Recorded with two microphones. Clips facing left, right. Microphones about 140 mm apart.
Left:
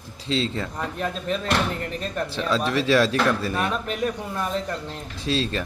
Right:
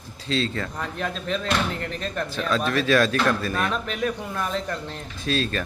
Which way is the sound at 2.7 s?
25° left (ahead or behind).